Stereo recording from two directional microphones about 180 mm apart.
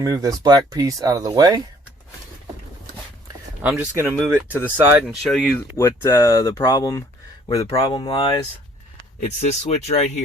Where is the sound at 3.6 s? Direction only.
10° right (ahead or behind).